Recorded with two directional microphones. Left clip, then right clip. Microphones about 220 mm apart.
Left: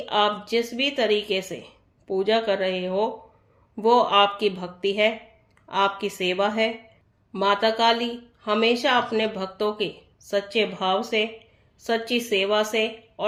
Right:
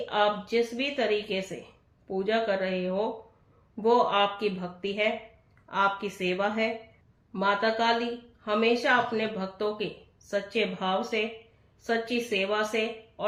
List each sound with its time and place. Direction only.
0.0 s speech: 45° left (ahead or behind)